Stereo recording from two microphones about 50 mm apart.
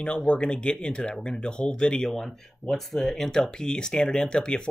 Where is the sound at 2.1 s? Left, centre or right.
Centre.